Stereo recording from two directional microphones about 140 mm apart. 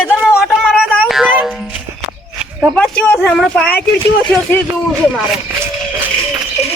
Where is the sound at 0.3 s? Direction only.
5° right (ahead or behind).